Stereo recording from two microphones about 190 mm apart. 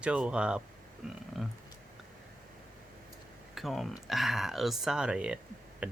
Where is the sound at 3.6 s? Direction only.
Centre (ahead or behind).